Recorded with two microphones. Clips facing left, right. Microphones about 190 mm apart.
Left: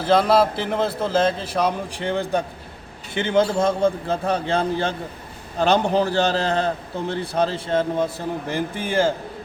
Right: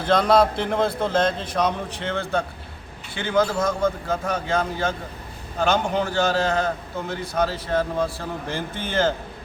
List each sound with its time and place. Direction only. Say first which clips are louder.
0.0 s a man's voice: left 1 dB; 5° left (ahead or behind)